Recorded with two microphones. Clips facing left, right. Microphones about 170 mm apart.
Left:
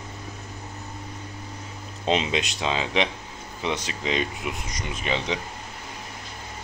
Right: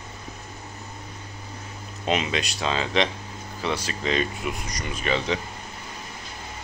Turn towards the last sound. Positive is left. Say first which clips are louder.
# right 2 dB
turn(degrees=15)  # may be behind; listen again after turning